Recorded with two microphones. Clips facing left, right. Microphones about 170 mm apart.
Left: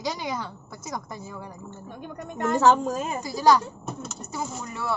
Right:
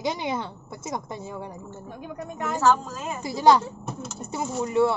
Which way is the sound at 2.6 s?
60° left (ahead or behind).